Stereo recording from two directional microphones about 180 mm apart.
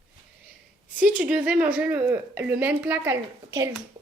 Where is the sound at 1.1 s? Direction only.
10° right (ahead or behind).